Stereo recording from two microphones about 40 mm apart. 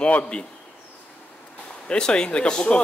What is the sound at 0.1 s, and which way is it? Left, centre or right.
Speech, left.